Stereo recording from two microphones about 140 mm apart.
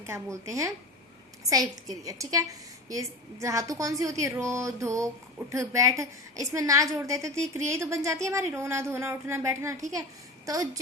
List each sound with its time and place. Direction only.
0.0 s a woman's voice: 20° right (ahead or behind)